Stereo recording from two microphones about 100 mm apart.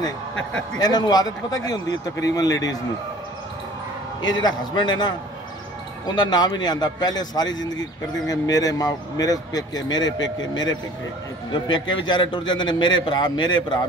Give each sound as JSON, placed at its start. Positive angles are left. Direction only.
{"t": 0.7, "sound": "speech", "side_deg": 45}
{"t": 4.2, "sound": "speech", "side_deg": 45}